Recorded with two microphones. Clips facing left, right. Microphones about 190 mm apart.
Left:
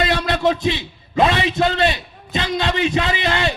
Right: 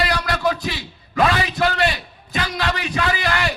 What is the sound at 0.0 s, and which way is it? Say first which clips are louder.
A man's voice: left 3 dB; 25° left (ahead or behind).